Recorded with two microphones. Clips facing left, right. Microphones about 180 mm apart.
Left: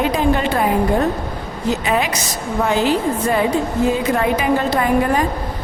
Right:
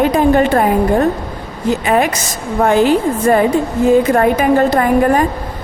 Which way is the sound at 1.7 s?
50° right (ahead or behind).